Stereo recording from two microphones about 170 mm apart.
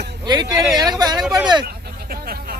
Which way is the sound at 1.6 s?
65° right (ahead or behind).